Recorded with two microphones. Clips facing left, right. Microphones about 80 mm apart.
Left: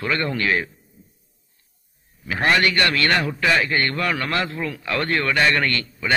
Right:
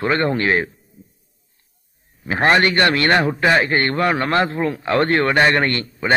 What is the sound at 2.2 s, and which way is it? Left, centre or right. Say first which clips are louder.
A man's voice: right 4 dB; right.